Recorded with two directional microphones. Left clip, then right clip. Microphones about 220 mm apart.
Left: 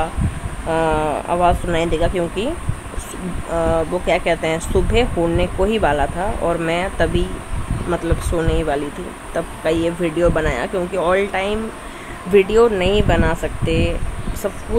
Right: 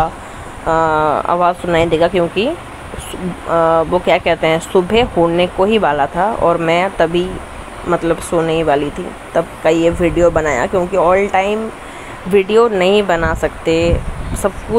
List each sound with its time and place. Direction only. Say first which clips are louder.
0.7 s speech: right 5 dB; 10° right (ahead or behind)
3.5 s speech: right 7 dB; 5° right (ahead or behind)